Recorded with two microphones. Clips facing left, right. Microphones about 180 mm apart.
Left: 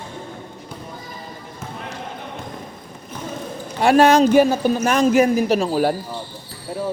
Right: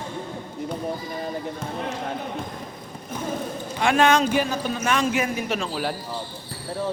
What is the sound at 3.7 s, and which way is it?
A man's voice, 40° left (ahead or behind).